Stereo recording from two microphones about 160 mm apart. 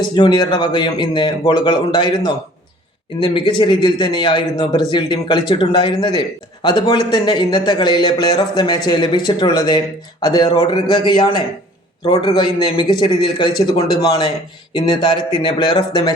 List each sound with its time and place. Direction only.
0.2 s a man's voice: 25° left (ahead or behind)